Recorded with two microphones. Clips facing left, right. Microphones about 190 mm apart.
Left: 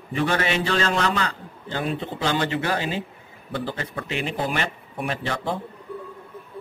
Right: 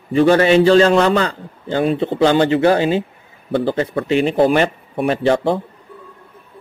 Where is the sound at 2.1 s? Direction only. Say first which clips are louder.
Right 12 dB; 60° right (ahead or behind).